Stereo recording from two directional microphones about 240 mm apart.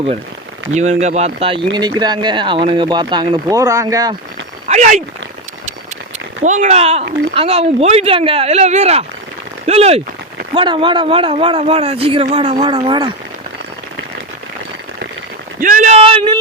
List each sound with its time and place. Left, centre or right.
0.7 s speech: right; by 4.1 s centre
4.7 s speech: right
6.4 s speech: right
15.6 s a sound: right